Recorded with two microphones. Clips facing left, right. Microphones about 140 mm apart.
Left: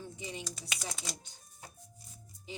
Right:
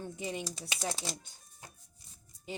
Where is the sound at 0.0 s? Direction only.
55° right (ahead or behind).